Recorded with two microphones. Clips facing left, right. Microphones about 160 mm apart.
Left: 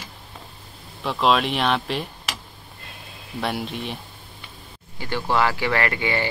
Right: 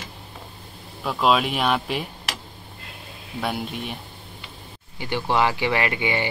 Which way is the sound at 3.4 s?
5° right (ahead or behind).